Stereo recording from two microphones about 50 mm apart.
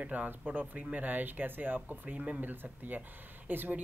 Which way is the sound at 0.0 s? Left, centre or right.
Right.